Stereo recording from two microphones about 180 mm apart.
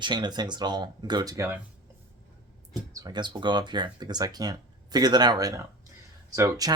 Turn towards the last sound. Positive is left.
turn(degrees=-20)  # may be behind; listen again after turning